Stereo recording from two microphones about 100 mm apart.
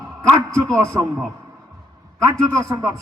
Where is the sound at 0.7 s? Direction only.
30° right (ahead or behind).